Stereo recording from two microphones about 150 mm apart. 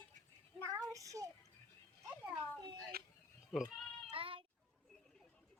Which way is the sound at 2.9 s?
90° right.